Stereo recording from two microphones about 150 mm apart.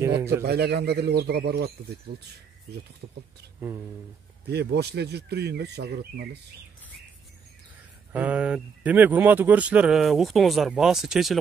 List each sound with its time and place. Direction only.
0.4 s speech: 90° right
4.5 s speech: 90° right
8.1 s speech: 10° right (ahead or behind)